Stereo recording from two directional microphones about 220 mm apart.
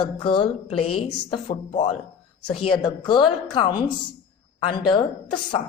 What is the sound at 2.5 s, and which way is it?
A woman's voice, 25° left (ahead or behind).